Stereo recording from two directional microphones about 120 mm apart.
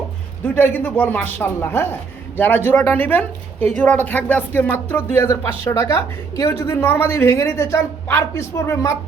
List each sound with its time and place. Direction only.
0.4 s speech: 15° left (ahead or behind)